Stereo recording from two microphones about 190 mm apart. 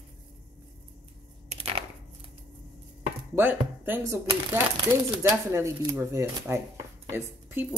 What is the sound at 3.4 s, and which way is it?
Speech, 10° right (ahead or behind).